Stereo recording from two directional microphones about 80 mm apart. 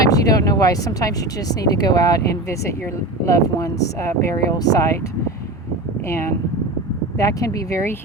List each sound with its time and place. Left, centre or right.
0.1 s speech: left
4.5 s speech: left
6.1 s speech: left
7.2 s speech: left